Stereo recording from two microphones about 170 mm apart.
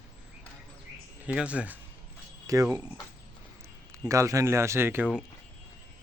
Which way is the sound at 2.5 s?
20° right (ahead or behind).